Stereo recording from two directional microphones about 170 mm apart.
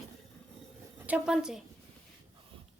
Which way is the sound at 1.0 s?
5° right (ahead or behind).